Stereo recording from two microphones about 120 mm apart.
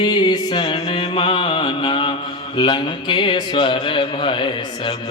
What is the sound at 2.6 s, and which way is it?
Speech, 40° left (ahead or behind).